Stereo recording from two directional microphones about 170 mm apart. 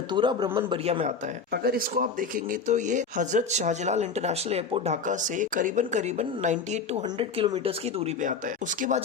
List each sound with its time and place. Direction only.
0.1 s a man's voice: 25° right (ahead or behind)
1.5 s a man's voice: 65° right (ahead or behind); by 8.1 s 35° right (ahead or behind)
8.8 s a man's voice: 55° right (ahead or behind)